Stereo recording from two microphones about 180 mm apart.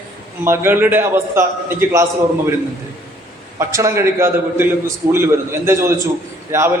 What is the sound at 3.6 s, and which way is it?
A man's voice, 15° right (ahead or behind).